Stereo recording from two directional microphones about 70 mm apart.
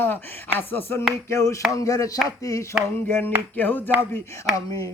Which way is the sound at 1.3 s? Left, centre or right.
Left.